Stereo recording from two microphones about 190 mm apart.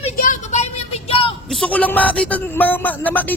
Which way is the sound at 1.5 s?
5° left (ahead or behind).